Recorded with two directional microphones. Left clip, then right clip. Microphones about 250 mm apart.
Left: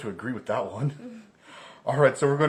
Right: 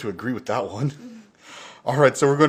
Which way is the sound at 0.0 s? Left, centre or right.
Right.